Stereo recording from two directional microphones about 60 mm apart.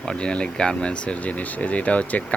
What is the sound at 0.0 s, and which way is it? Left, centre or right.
Speech, centre.